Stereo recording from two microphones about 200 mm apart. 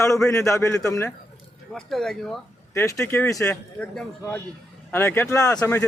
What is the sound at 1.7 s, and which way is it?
Speech, centre (ahead or behind).